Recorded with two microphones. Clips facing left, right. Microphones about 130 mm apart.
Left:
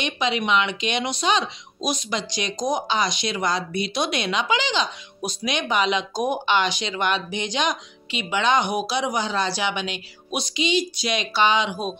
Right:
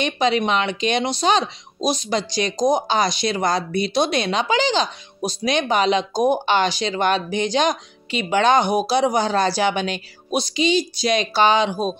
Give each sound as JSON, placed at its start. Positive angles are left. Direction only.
{"t": 0.0, "sound": "speech", "side_deg": -40}